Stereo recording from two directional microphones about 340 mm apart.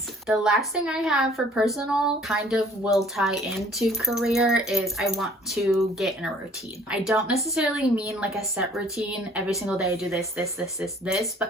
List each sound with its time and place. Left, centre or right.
0.3 s speech: centre